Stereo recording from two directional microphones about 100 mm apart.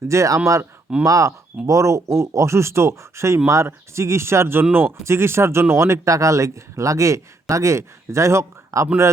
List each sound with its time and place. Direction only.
0.1 s speech: 30° right (ahead or behind)